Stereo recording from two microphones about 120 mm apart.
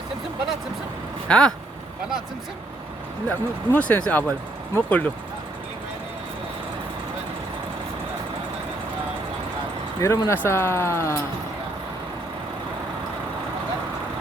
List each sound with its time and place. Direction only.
1.3 s speech: 5° left (ahead or behind)
3.2 s speech: 15° left (ahead or behind)
10.0 s speech: 25° left (ahead or behind)